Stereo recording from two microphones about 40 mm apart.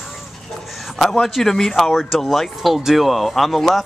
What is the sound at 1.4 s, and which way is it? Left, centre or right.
Speech, centre.